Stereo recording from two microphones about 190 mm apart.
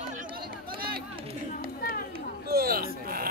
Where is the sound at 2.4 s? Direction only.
55° right (ahead or behind).